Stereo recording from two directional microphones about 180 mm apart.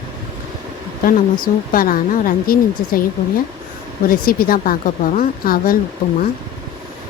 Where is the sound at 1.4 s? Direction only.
50° left (ahead or behind).